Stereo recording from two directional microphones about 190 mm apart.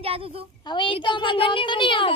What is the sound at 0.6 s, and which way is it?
Speech, 25° left (ahead or behind).